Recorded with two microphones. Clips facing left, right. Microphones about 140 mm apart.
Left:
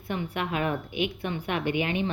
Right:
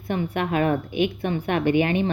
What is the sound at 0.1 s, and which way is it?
A woman's voice, 50° right (ahead or behind).